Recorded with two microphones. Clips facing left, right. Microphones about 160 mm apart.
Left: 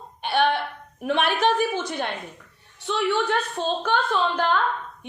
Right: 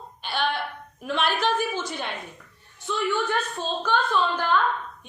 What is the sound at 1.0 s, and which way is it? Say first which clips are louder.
A woman's voice: left 3 dB; 65° left (ahead or behind).